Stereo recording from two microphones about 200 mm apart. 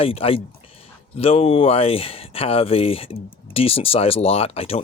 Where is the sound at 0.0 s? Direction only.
30° left (ahead or behind).